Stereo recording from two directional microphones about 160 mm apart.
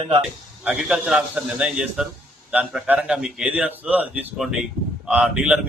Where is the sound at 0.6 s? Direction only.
5° right (ahead or behind).